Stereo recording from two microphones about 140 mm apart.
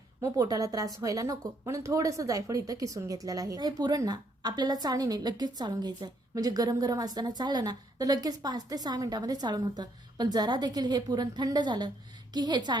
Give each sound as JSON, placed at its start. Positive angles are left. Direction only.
{"t": 0.2, "sound": "a woman's voice", "side_deg": -25}